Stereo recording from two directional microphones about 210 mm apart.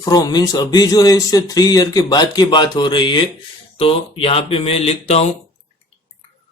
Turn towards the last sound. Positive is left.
turn(degrees=30)  # may be behind; listen again after turning